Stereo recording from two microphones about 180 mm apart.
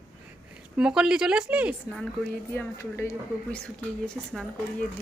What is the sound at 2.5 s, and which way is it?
Speech, 15° left (ahead or behind).